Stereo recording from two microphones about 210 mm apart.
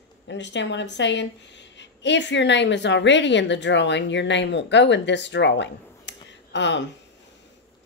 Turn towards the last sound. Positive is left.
turn(degrees=55)  # may be behind; listen again after turning